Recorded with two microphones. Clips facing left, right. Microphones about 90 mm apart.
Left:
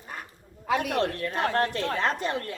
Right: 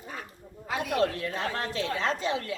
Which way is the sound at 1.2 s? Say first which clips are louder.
Left 6 dB; 60° left (ahead or behind).